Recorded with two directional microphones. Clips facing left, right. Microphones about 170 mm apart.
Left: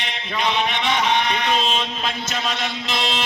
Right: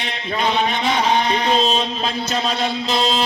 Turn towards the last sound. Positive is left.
turn(degrees=-35)  # may be behind; listen again after turning